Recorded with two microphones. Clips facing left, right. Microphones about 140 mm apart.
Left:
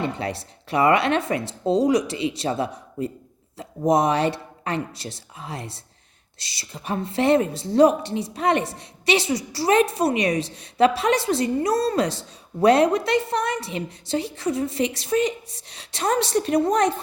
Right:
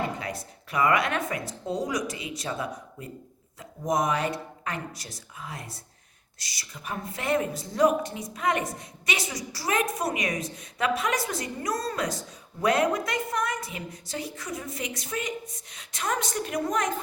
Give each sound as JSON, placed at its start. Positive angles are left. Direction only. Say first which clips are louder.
{"t": 0.0, "sound": "a woman's voice", "louder": "left 4 dB", "side_deg": 30}